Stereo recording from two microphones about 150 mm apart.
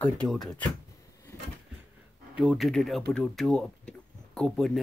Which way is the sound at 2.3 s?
5° right (ahead or behind).